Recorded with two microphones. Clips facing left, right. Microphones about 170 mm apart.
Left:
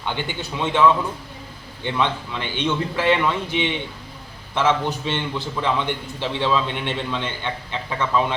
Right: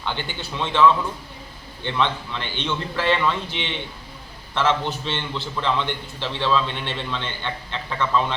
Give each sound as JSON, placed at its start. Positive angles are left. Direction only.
{"t": 0.0, "sound": "a man's voice", "side_deg": 15}